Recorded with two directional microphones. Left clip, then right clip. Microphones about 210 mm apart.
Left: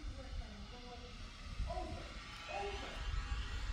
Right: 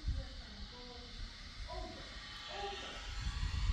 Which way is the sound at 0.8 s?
5° right (ahead or behind).